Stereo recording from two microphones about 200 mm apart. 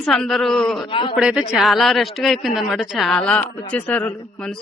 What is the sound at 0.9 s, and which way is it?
Speech, 25° left (ahead or behind).